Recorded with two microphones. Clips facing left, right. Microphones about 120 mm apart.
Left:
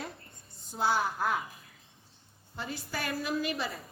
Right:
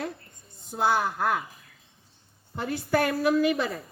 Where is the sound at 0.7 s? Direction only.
60° right (ahead or behind).